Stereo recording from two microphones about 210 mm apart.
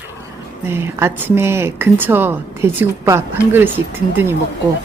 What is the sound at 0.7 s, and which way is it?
Speech, 10° right (ahead or behind).